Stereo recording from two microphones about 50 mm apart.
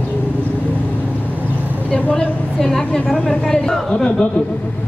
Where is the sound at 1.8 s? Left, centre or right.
Left.